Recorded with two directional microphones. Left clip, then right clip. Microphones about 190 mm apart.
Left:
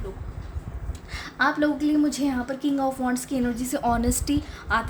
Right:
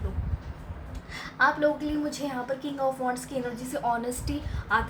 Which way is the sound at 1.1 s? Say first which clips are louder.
Even; 45° left (ahead or behind).